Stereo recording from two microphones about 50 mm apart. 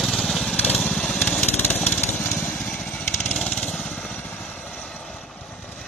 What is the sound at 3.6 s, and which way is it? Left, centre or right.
Lawn mower, centre.